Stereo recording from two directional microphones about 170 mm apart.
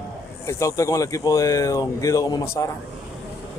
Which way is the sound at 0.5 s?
20° left (ahead or behind).